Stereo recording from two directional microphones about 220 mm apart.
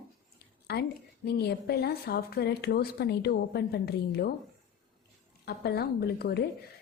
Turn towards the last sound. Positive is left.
turn(degrees=45)  # may be behind; listen again after turning